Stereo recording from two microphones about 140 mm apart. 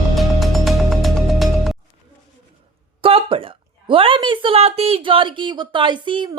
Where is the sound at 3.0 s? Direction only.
40° right (ahead or behind).